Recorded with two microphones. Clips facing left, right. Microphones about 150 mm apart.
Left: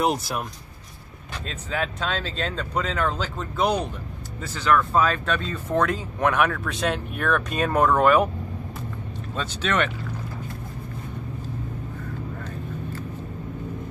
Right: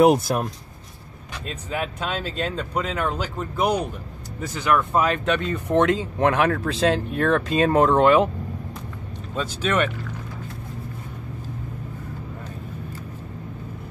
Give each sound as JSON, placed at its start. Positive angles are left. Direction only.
{"t": 0.0, "sound": "speech", "side_deg": -50}
{"t": 1.5, "sound": "speech", "side_deg": -10}
{"t": 9.3, "sound": "speech", "side_deg": -10}